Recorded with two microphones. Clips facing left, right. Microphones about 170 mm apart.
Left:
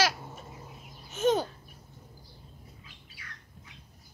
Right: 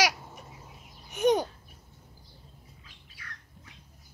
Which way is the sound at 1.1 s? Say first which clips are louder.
Right 2 dB; 15° right (ahead or behind).